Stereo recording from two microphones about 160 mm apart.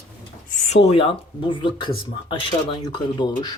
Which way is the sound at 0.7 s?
40° left (ahead or behind).